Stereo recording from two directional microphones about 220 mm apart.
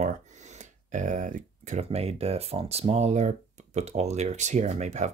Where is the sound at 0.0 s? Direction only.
30° right (ahead or behind).